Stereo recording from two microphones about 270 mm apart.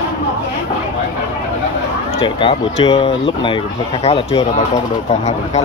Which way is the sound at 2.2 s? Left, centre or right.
Left.